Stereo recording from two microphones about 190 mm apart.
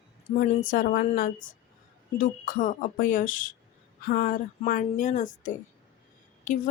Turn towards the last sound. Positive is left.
turn(degrees=40)  # may be behind; listen again after turning